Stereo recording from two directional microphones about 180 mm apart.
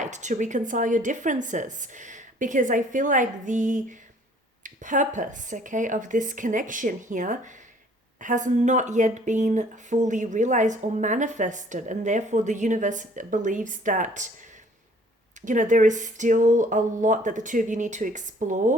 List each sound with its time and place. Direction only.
0.0 s speech: 40° right (ahead or behind)